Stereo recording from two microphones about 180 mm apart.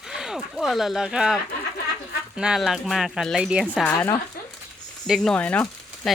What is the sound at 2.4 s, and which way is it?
Speech, 5° right (ahead or behind).